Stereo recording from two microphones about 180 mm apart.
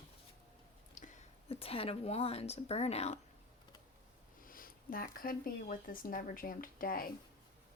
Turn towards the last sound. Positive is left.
turn(degrees=50)  # may be behind; listen again after turning